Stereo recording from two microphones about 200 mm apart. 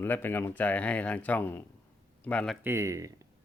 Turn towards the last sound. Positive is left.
turn(degrees=-15)  # may be behind; listen again after turning